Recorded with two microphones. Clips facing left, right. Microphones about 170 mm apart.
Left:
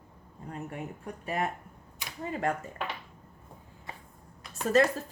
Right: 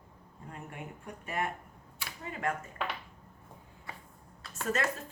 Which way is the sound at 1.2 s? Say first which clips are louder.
Left 3 dB; 30° left (ahead or behind).